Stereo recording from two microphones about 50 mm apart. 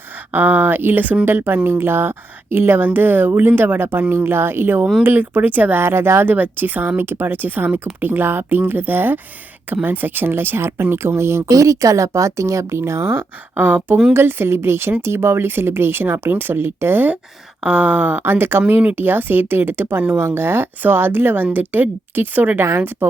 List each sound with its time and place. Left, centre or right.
0.3 s speech: right
5.8 s speech: right
6.2 s speech: right
17.6 s a sound: right
18.2 s speech: right